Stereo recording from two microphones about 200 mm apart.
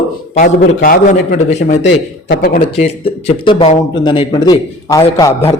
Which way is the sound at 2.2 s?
60° left (ahead or behind).